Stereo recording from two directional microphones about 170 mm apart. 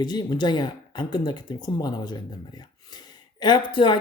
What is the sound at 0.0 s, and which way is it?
Speech, 25° left (ahead or behind).